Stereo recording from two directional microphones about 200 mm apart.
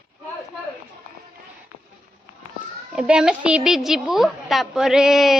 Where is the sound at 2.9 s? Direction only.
5° right (ahead or behind).